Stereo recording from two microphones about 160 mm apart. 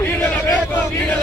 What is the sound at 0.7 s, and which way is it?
Chant, 10° left (ahead or behind).